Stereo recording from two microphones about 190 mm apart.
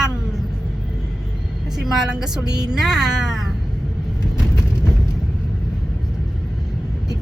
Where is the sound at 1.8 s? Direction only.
5° right (ahead or behind).